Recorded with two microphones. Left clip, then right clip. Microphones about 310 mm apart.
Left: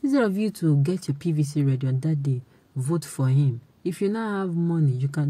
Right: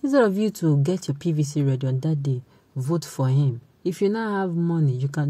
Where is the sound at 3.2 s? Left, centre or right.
Centre.